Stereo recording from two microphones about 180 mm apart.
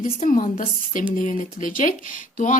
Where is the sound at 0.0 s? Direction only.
50° left (ahead or behind).